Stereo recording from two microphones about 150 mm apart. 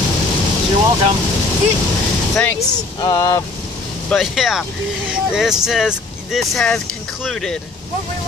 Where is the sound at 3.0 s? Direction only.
25° left (ahead or behind).